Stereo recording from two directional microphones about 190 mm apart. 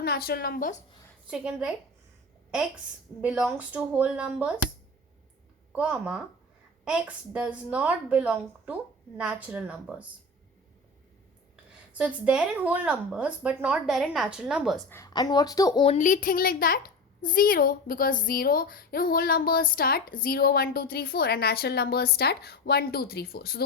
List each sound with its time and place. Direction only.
0.0 s a woman's voice: 55° left (ahead or behind)
1.3 s a woman's voice: 5° right (ahead or behind)
3.2 s a woman's voice: 5° right (ahead or behind)
5.7 s a woman's voice: 5° right (ahead or behind)
11.9 s a woman's voice: 5° right (ahead or behind)
14.8 s a woman's voice: 15° left (ahead or behind)
16.0 s a woman's voice: 45° left (ahead or behind)